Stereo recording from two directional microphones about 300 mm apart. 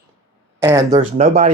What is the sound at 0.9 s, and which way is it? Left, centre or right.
Speech, right.